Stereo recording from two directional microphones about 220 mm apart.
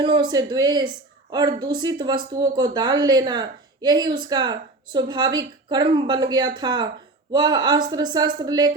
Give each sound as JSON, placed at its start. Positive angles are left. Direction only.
{"t": 0.0, "sound": "speech", "side_deg": -20}